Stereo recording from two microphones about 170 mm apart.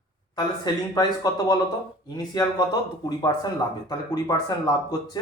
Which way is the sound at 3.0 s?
20° left (ahead or behind).